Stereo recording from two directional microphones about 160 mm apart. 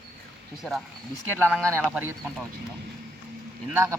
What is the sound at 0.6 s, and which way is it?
Speech, centre (ahead or behind).